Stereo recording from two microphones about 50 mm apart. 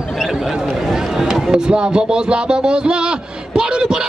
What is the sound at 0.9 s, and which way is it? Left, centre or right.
Speech, centre.